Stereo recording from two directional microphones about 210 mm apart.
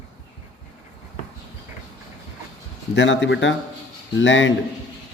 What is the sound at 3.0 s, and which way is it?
A man's voice, 60° left (ahead or behind).